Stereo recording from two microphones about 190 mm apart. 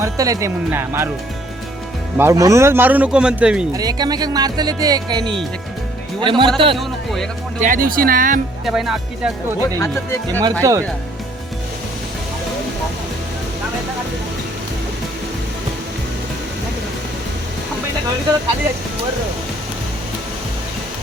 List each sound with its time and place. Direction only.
0.0 s speech: 15° right (ahead or behind)
2.1 s speech: 15° right (ahead or behind)
3.7 s speech: 20° right (ahead or behind)
6.7 s music: centre (ahead or behind)
7.6 s speech: 45° right (ahead or behind)
8.6 s music: centre (ahead or behind)
9.6 s speech: 15° left (ahead or behind)
10.6 s speech: 15° right (ahead or behind)